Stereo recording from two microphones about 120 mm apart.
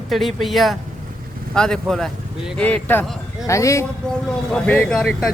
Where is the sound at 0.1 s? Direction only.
Centre (ahead or behind).